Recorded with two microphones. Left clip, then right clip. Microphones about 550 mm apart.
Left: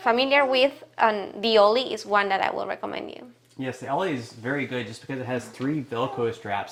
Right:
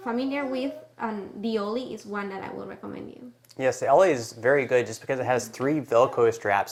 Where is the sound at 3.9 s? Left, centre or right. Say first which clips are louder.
Right 8 dB; right.